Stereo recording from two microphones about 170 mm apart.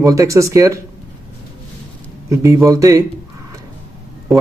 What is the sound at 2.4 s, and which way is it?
Speech, 20° right (ahead or behind).